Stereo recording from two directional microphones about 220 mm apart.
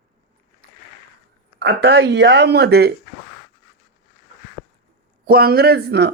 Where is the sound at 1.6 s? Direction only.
50° right (ahead or behind).